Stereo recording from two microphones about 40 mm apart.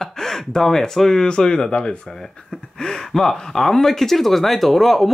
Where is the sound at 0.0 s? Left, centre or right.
Centre.